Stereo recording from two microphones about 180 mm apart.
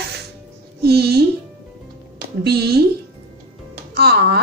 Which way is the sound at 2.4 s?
65° right (ahead or behind).